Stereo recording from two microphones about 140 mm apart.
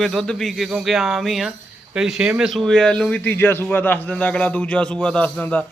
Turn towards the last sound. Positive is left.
turn(degrees=10)  # may be behind; listen again after turning